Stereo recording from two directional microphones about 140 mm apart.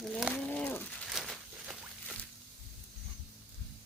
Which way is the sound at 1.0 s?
Centre (ahead or behind).